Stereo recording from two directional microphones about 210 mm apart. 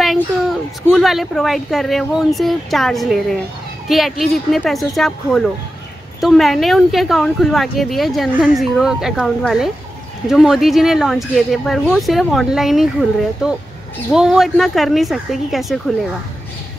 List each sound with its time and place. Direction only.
0.0 s speech: centre (ahead or behind)
14.1 s speech: centre (ahead or behind)